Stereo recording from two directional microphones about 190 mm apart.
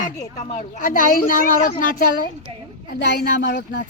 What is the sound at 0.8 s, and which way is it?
Speech, 45° left (ahead or behind).